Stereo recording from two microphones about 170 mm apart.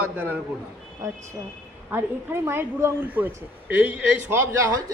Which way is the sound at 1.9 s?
15° right (ahead or behind).